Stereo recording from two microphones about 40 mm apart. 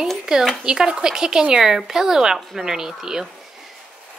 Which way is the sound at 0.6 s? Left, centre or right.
Centre.